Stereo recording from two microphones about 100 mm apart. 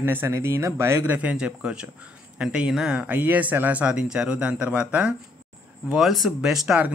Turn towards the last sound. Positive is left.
turn(degrees=-5)  # may be behind; listen again after turning